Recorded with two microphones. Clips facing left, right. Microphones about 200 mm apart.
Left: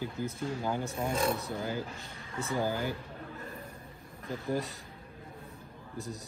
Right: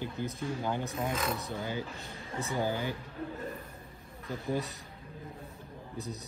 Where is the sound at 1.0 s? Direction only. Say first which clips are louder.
Left 3 dB; 30° left (ahead or behind).